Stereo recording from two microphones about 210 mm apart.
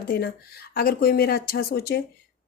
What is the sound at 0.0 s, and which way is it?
Speech, 45° left (ahead or behind).